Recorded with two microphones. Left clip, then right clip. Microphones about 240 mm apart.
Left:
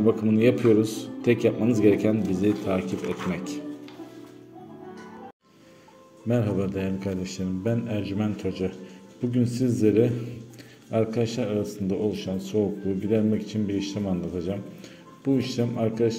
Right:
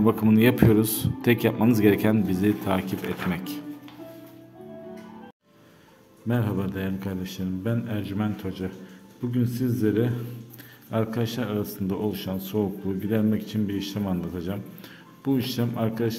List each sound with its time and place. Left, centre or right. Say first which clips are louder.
0.0 s a man's voice: even; right
6.2 s speech: left 3 dB; centre